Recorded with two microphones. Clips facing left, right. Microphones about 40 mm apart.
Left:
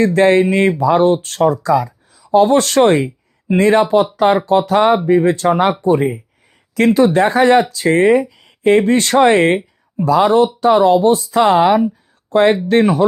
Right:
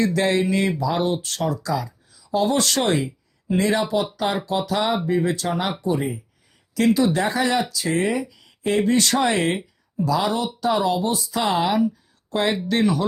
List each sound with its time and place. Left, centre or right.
0.0 s speech: left